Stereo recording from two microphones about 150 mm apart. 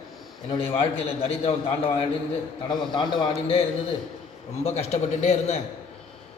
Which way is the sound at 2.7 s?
30° left (ahead or behind).